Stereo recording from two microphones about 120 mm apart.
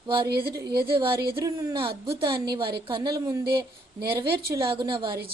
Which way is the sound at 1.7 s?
45° right (ahead or behind).